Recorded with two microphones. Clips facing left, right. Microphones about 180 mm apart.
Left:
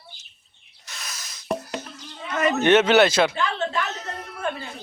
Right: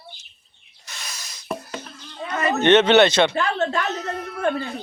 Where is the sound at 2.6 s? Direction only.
5° left (ahead or behind).